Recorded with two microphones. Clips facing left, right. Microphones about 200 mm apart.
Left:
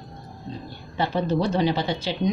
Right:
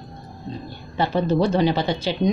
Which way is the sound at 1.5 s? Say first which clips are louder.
Right 3 dB; 60° right (ahead or behind).